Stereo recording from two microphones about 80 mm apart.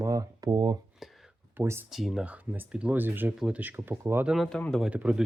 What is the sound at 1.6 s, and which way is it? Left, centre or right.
Speech, right.